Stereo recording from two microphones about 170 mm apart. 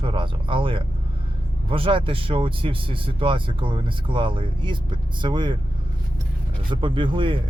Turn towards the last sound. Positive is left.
turn(degrees=-30)  # may be behind; listen again after turning